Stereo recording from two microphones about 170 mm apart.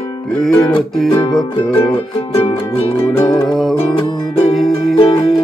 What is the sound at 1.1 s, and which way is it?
Music, 25° left (ahead or behind).